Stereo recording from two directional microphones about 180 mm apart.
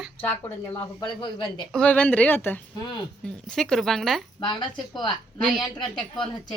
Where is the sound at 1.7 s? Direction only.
5° left (ahead or behind).